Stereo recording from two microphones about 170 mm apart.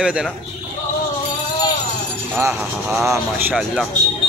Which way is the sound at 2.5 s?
Centre (ahead or behind).